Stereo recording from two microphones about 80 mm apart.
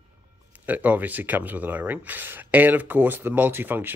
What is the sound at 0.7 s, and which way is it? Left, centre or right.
Speech, right.